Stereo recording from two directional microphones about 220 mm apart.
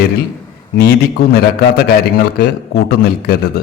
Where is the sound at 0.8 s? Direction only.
45° left (ahead or behind).